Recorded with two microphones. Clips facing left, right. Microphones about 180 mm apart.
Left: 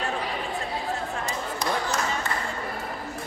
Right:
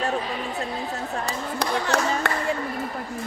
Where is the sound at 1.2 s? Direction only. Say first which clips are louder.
Right 2 dB; 65° right (ahead or behind).